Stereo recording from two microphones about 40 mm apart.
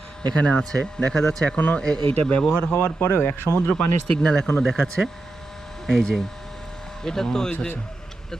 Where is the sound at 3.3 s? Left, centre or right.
Left.